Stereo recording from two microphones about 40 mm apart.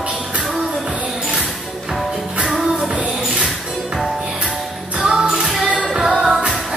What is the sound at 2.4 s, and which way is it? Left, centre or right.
Music, centre.